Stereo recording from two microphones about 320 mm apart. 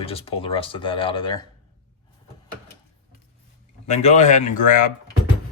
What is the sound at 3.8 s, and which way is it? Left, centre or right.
Speech, left.